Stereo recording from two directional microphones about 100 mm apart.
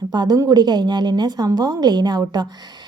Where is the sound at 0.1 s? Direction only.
45° right (ahead or behind).